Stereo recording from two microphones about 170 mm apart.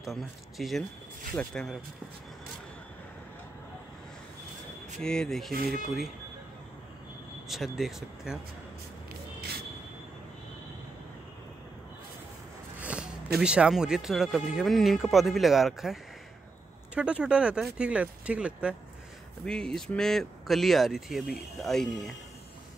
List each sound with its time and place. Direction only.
0.0 s speech: centre (ahead or behind)
5.0 s speech: 5° left (ahead or behind)
5.5 s speech: 60° right (ahead or behind)
7.4 s speech: centre (ahead or behind)
9.1 s vehicle: 70° right (ahead or behind)
12.8 s a sound: 5° right (ahead or behind)
13.4 s speech: 5° right (ahead or behind)
19.4 s speech: 5° left (ahead or behind)